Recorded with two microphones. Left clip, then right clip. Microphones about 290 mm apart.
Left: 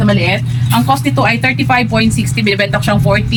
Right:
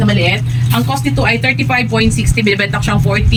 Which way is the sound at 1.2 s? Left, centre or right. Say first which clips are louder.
Even; centre.